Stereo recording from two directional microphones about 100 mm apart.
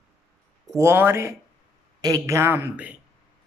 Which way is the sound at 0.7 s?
25° right (ahead or behind).